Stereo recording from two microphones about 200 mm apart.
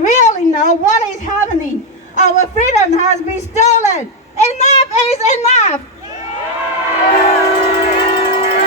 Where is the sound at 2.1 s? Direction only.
35° left (ahead or behind).